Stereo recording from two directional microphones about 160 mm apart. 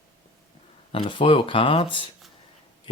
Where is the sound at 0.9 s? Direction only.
30° left (ahead or behind).